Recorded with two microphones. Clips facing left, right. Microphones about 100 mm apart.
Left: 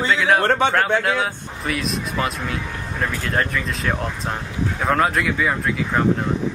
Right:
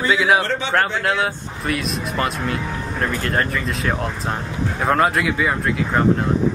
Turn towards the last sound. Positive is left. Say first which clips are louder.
# right 1 dB
turn(degrees=0)  # may be behind; listen again after turning